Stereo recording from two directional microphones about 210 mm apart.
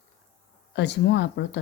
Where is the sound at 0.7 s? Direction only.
55° left (ahead or behind).